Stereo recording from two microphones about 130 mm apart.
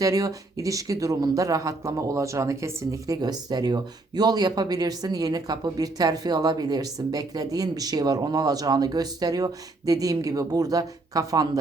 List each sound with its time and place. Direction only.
0.0 s speech: 25° right (ahead or behind)